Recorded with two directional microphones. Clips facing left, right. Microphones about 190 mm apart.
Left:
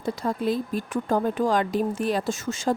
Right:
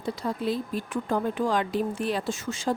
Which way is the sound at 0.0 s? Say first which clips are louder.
Left 3 dB; 45° left (ahead or behind).